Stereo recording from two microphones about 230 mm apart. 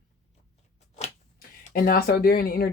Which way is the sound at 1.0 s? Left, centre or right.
Left.